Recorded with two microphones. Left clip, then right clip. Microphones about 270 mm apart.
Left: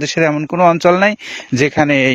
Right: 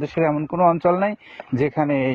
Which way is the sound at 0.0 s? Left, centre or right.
Left.